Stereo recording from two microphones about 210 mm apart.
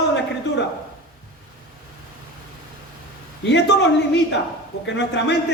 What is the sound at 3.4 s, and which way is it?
Speech, 55° left (ahead or behind).